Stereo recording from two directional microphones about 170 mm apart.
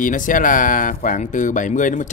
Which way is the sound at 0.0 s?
50° left (ahead or behind).